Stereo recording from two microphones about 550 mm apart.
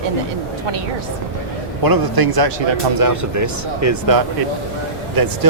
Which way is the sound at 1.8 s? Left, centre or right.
Right.